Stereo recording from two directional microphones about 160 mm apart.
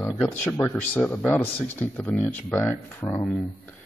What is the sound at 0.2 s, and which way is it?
Speech, 5° left (ahead or behind).